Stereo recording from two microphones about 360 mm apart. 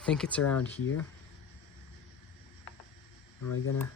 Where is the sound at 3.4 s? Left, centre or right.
Left.